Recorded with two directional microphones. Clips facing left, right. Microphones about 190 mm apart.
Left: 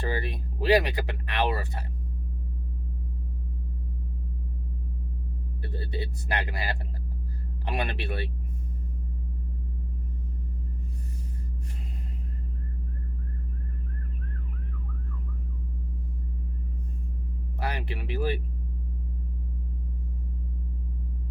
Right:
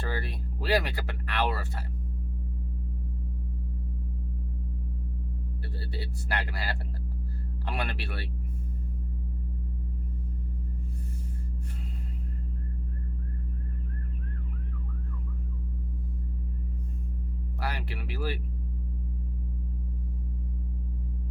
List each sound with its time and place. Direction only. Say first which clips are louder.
0.0 s a sound: left 4 dB; 20° left (ahead or behind)
5.7 s speech: left 6 dB; 20° left (ahead or behind)
17.6 s speech: left 3 dB; 20° left (ahead or behind)